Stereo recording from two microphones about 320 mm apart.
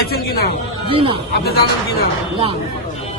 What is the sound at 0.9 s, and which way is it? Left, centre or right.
Speech, centre.